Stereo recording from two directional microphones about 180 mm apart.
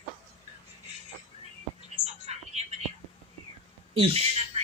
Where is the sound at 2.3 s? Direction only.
35° right (ahead or behind).